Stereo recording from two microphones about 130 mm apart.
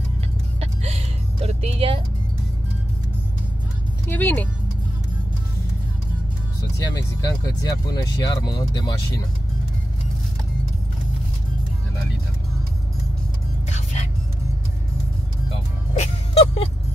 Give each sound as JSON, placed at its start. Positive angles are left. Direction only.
{"t": 0.6, "sound": "music", "side_deg": -50}
{"t": 4.1, "sound": "speech", "side_deg": 15}
{"t": 6.8, "sound": "speech", "side_deg": 25}
{"t": 13.7, "sound": "music", "side_deg": 60}
{"t": 16.0, "sound": "music", "side_deg": 50}